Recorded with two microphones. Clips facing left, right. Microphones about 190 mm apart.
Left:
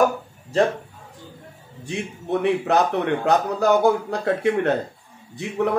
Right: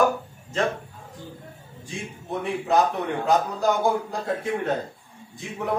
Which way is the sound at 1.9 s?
70° left (ahead or behind).